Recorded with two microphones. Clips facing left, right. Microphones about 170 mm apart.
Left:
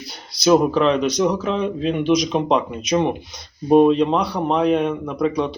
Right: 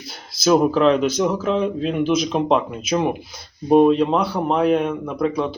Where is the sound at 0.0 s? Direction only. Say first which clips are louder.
Left 1 dB; centre (ahead or behind).